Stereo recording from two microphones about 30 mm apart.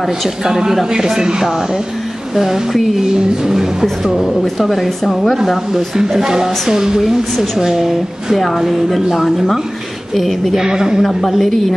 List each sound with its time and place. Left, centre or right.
0.4 s a woman's voice: centre
2.3 s a woman's voice: centre
3.4 s music: centre
4.0 s a woman's voice: centre
4.6 s a woman's voice: centre
5.9 s speech: centre
7.0 s a woman's voice: centre
8.4 s a woman's voice: centre
8.6 s a woman's voice: centre
10.5 s speech: centre
11.0 s a woman's voice: centre